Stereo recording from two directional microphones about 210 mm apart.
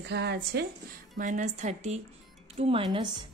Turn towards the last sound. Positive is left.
turn(degrees=-20)  # may be behind; listen again after turning